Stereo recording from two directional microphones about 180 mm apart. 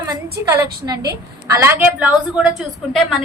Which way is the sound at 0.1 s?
20° right (ahead or behind).